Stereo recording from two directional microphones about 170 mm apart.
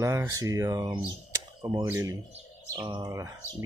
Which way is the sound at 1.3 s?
20° right (ahead or behind).